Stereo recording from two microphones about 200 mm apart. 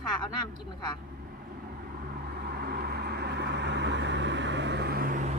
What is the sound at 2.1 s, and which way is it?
Vehicle, 50° right (ahead or behind).